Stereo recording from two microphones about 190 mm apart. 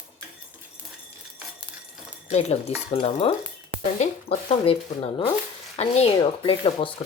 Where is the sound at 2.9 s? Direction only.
30° left (ahead or behind).